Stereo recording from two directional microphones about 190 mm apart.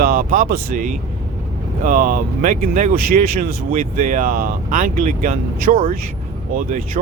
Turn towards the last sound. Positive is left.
turn(degrees=-45)  # may be behind; listen again after turning